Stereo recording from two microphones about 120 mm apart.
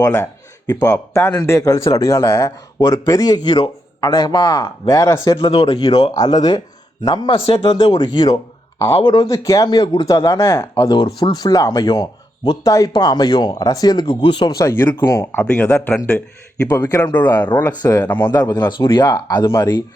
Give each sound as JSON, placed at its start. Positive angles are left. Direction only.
{"t": 0.0, "sound": "speech", "side_deg": 25}
{"t": 5.6, "sound": "speech", "side_deg": 50}
{"t": 5.9, "sound": "speech", "side_deg": 35}
{"t": 7.3, "sound": "speech", "side_deg": 45}
{"t": 10.8, "sound": "speech", "side_deg": 35}
{"t": 14.6, "sound": "speech", "side_deg": 20}
{"t": 16.6, "sound": "speech", "side_deg": 35}
{"t": 18.1, "sound": "speech", "side_deg": 20}
{"t": 18.3, "sound": "speech", "side_deg": 30}